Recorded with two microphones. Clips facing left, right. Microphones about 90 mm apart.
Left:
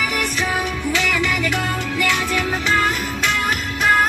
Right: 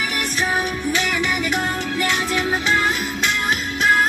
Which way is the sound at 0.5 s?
15° right (ahead or behind).